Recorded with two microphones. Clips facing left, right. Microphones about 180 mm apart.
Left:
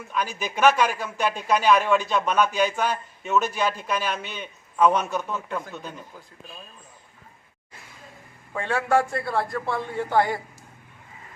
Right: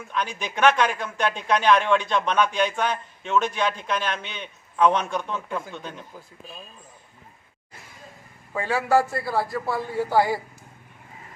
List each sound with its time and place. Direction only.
0.1 s a man's voice: 5° left (ahead or behind)
8.5 s a man's voice: 5° right (ahead or behind)